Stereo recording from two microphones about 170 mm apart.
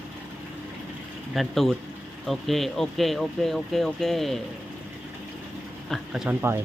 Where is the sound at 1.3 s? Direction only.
Centre (ahead or behind).